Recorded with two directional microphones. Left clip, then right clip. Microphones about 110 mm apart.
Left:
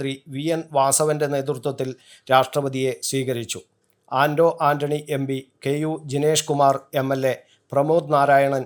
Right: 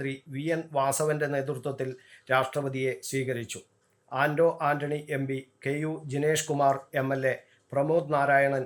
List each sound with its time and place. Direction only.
0.0 s speech: 35° left (ahead or behind)